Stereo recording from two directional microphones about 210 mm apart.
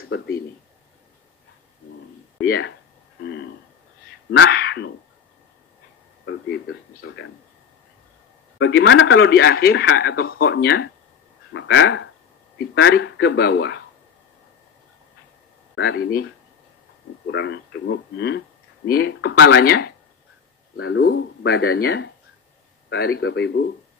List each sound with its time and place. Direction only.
0.1 s speech: 55° left (ahead or behind)
2.4 s speech: 50° left (ahead or behind)
4.3 s speech: 60° left (ahead or behind)
8.5 s speech: 60° left (ahead or behind)
15.7 s speech: 60° left (ahead or behind)
17.3 s speech: 60° left (ahead or behind)
20.7 s speech: 65° left (ahead or behind)